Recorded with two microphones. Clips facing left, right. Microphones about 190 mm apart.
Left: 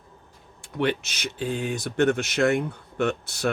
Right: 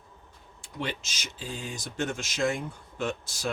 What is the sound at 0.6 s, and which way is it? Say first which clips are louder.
Speech: left 9 dB; 65° left (ahead or behind).